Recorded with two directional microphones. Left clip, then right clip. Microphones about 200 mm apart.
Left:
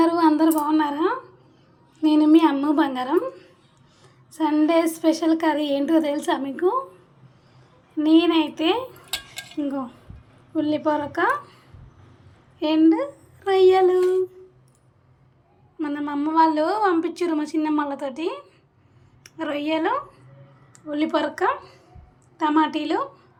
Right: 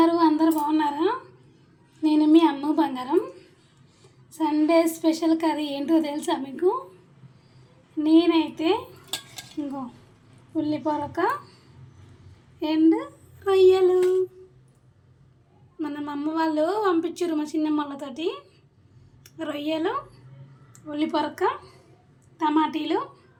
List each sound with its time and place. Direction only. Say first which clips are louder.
0.0 s a sound: left 2 dB; 15° left (ahead or behind)
2.0 s a woman's voice: left 2 dB; 15° left (ahead or behind)
7.9 s a woman's voice: left 2 dB; 15° left (ahead or behind)
10.5 s a woman's voice: left 4 dB; 15° left (ahead or behind)
12.5 s a child's voice: left 3 dB; 15° left (ahead or behind)
15.8 s a woman's voice: left 4 dB; 15° left (ahead or behind)